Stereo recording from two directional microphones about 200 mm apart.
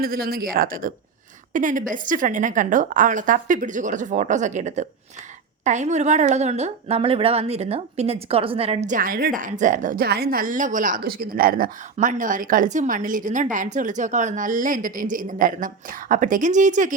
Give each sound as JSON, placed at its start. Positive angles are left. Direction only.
{"t": 0.0, "sound": "a woman's voice", "side_deg": -50}